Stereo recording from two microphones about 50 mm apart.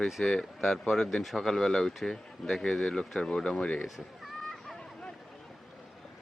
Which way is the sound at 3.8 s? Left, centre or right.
Centre.